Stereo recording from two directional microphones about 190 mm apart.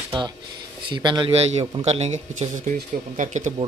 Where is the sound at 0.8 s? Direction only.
25° right (ahead or behind).